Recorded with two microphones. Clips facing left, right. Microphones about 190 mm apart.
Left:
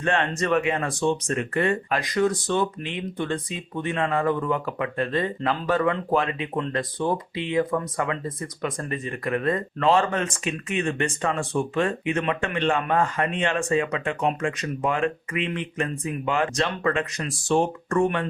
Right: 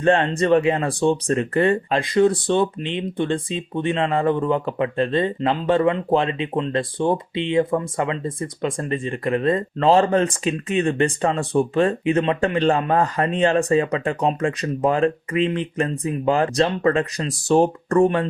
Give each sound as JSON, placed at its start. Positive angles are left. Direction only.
{"t": 0.0, "sound": "speech", "side_deg": -30}